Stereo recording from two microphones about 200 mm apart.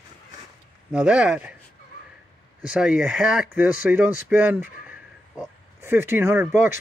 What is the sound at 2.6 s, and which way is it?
Speech, 5° right (ahead or behind).